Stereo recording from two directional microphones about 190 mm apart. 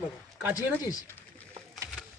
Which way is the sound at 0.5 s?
20° left (ahead or behind).